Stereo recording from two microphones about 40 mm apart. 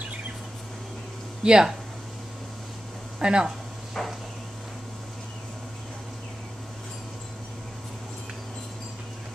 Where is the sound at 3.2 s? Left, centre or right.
Right.